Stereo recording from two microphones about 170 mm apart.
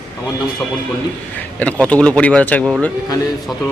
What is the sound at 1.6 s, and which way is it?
Speech, 5° left (ahead or behind).